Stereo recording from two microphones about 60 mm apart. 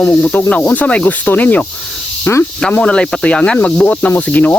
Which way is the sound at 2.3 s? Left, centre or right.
Left.